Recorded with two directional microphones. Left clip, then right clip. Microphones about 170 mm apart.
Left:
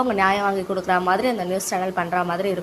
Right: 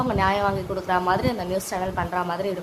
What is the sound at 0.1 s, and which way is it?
A woman's voice, 15° left (ahead or behind).